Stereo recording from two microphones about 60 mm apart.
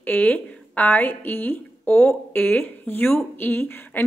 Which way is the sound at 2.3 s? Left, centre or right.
Left.